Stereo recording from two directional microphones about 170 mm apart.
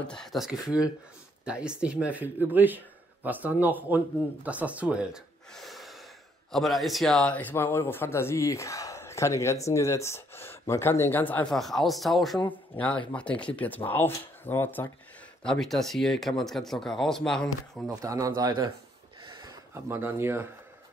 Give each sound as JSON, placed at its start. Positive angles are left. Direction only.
{"t": 0.1, "sound": "speech", "side_deg": 0}
{"t": 17.8, "sound": "a man's voice", "side_deg": -20}
{"t": 19.2, "sound": "a sound", "side_deg": -25}